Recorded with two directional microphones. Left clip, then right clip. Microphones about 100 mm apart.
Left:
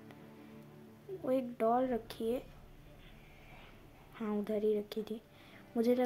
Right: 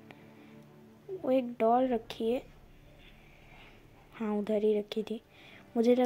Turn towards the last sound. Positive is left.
turn(degrees=-30)  # may be behind; listen again after turning